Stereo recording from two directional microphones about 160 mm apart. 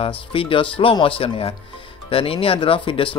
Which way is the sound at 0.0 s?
35° left (ahead or behind).